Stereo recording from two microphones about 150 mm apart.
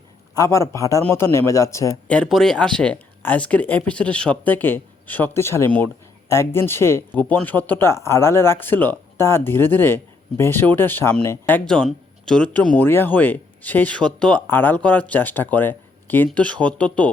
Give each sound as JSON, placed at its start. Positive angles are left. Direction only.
{"t": 0.3, "sound": "a man's voice", "side_deg": 20}
{"t": 2.0, "sound": "speech", "side_deg": 5}